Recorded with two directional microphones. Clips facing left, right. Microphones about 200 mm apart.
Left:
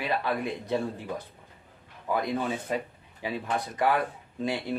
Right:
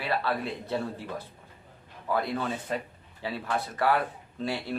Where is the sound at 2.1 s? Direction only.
15° left (ahead or behind).